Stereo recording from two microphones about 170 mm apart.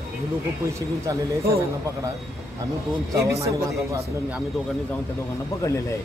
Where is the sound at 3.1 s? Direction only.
20° right (ahead or behind).